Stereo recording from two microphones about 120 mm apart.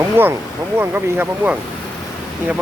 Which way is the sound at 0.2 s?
20° right (ahead or behind).